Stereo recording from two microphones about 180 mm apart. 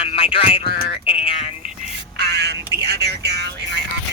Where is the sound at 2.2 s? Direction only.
65° right (ahead or behind).